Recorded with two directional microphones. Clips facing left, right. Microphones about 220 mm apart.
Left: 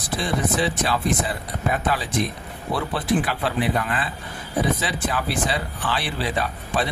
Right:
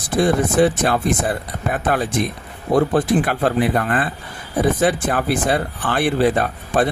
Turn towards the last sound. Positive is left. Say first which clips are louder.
# right 6 dB
turn(degrees=-50)  # may be behind; listen again after turning